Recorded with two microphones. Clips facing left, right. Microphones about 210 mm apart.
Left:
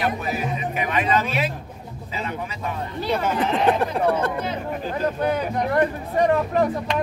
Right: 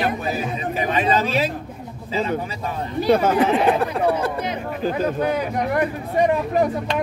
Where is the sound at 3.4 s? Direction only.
10° right (ahead or behind).